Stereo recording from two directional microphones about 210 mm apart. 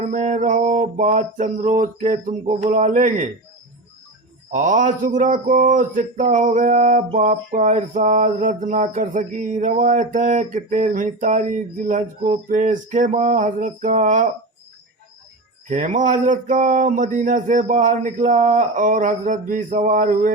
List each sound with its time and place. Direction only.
0.0 s speech: 35° right (ahead or behind)
4.5 s speech: 35° right (ahead or behind)
15.7 s speech: 35° right (ahead or behind)